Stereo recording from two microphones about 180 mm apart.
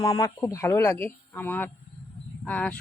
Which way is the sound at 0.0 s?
20° left (ahead or behind).